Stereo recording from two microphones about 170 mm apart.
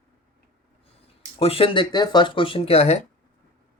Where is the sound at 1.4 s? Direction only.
35° left (ahead or behind).